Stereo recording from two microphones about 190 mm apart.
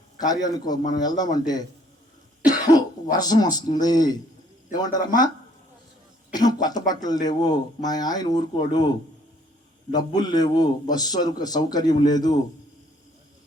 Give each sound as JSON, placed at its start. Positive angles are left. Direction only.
{"t": 0.2, "sound": "speech", "side_deg": 20}
{"t": 2.5, "sound": "throat clearing", "side_deg": 20}
{"t": 3.8, "sound": "speech", "side_deg": 20}
{"t": 6.3, "sound": "speech", "side_deg": 20}
{"t": 9.9, "sound": "speech", "side_deg": 20}